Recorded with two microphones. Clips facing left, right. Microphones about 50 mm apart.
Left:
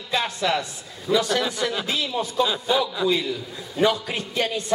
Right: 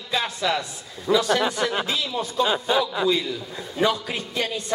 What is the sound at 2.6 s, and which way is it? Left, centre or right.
A man's voice, centre.